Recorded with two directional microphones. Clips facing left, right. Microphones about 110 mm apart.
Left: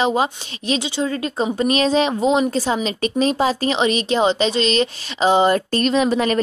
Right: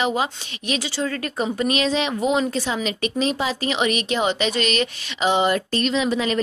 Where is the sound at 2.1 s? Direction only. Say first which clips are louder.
Left 4 dB; 25° left (ahead or behind).